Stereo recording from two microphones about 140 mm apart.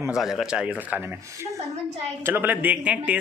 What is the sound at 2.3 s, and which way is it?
Speech, 15° right (ahead or behind).